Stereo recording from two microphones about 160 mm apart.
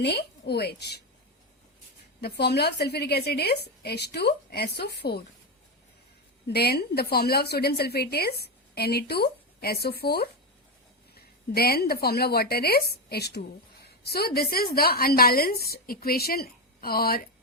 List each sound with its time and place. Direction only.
0.0 s a woman's voice: 90° left
2.2 s a woman's voice: 90° left
6.5 s a woman's voice: 85° left; by 17.2 s 70° left (ahead or behind)